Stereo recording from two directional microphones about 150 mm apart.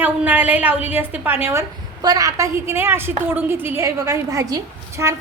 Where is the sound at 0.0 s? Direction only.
10° right (ahead or behind).